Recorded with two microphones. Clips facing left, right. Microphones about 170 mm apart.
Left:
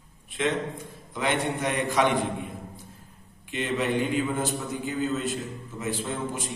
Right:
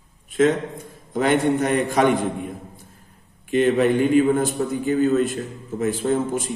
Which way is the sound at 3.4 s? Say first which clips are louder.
Right 10 dB; 50° right (ahead or behind).